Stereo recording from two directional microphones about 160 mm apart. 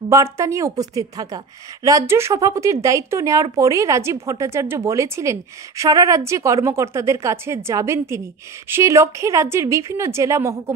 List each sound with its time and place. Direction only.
0.1 s a woman's voice: 15° right (ahead or behind)